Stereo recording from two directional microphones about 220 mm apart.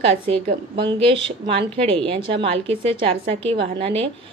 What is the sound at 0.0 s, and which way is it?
A woman's voice, 25° right (ahead or behind).